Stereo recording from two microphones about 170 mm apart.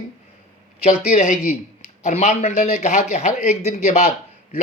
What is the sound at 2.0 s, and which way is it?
Speech, 40° left (ahead or behind).